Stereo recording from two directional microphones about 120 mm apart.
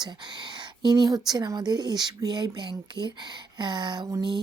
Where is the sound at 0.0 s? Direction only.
35° right (ahead or behind).